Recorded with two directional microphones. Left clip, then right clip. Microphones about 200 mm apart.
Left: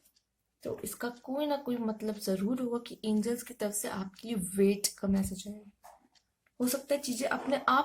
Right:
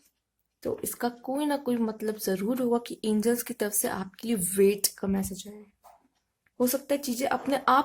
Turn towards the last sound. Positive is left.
turn(degrees=-45)  # may be behind; listen again after turning